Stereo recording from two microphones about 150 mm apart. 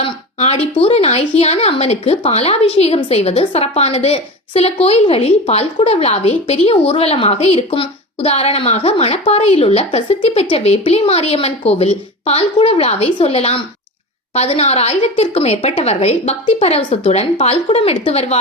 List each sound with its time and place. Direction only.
0.0 s a woman's voice: 45° left (ahead or behind)